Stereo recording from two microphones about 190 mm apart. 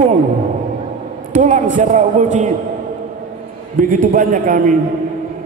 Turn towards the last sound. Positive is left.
turn(degrees=-45)  # may be behind; listen again after turning